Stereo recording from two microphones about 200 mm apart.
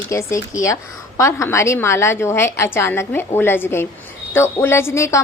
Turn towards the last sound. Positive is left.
turn(degrees=15)  # may be behind; listen again after turning